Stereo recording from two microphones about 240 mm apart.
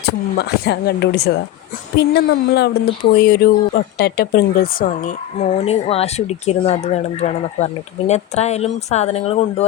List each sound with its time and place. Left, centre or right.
0.0 s speech: left